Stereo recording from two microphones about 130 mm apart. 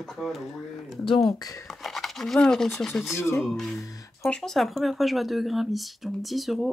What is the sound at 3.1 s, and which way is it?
Speech, 20° left (ahead or behind).